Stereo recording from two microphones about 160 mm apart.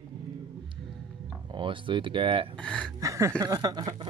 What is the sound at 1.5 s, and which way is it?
Speech, 30° right (ahead or behind).